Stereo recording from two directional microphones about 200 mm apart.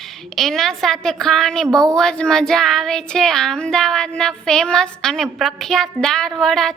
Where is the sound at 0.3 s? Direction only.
Centre (ahead or behind).